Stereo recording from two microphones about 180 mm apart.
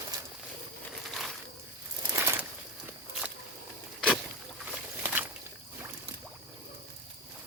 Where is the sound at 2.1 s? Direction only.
15° right (ahead or behind).